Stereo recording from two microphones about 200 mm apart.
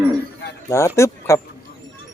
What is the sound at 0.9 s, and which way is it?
Speech, 15° left (ahead or behind).